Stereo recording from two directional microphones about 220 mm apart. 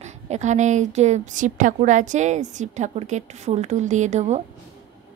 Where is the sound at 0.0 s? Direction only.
30° right (ahead or behind).